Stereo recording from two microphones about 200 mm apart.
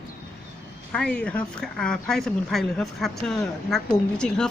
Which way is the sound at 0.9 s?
5° left (ahead or behind).